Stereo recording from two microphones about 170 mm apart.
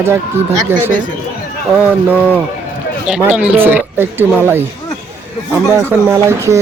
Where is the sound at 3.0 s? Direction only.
5° right (ahead or behind).